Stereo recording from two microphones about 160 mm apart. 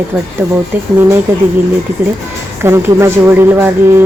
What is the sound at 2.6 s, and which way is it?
A woman's voice, 15° right (ahead or behind).